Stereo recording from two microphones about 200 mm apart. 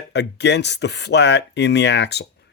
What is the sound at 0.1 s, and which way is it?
Speech, 60° left (ahead or behind).